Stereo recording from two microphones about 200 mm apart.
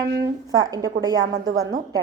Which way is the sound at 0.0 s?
20° right (ahead or behind).